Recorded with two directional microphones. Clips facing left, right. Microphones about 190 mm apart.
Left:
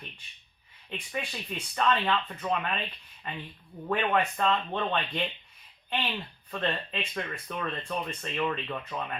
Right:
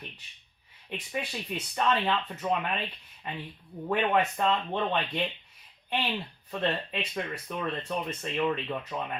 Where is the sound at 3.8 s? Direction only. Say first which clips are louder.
Right 1 dB; 15° right (ahead or behind).